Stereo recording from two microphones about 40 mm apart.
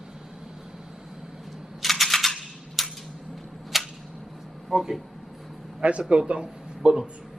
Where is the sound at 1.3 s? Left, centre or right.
Centre.